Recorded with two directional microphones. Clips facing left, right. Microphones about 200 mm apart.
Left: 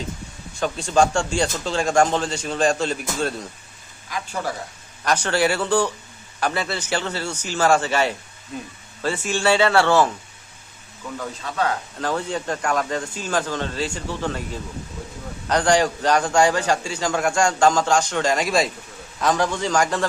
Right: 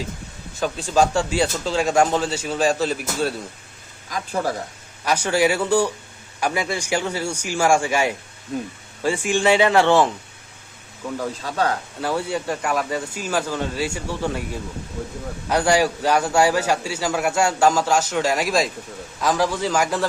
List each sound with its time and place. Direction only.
0.6 s speech: 5° right (ahead or behind)
4.1 s speech: 35° right (ahead or behind)
5.0 s a man's voice: 10° right (ahead or behind)
11.2 s speech: 35° right (ahead or behind)
11.9 s a man's voice: 10° right (ahead or behind)